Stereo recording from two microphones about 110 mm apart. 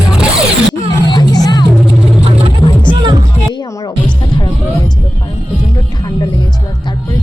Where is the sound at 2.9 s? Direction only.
40° right (ahead or behind).